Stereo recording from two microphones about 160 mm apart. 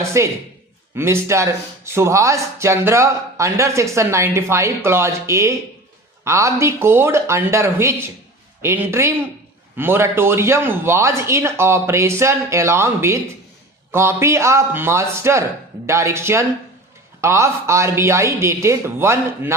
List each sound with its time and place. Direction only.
0.0 s speech: 20° right (ahead or behind)